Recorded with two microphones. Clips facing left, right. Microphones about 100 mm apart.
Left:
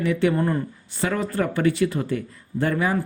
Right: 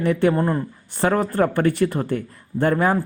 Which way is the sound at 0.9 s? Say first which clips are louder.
Right 5 dB; 50° right (ahead or behind).